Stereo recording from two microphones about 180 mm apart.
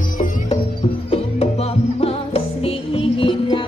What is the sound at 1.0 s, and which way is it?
Music, 35° left (ahead or behind).